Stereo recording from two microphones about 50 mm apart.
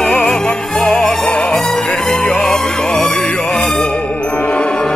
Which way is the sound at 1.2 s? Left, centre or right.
Left.